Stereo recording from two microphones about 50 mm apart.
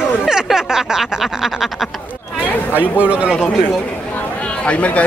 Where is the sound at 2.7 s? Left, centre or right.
Right.